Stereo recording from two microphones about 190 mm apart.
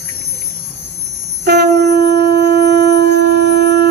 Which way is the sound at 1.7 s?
60° right (ahead or behind).